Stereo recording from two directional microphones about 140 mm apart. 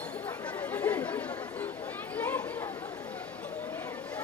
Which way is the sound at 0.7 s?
10° left (ahead or behind).